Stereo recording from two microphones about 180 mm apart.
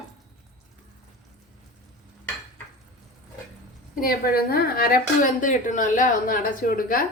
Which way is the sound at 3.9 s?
55° left (ahead or behind).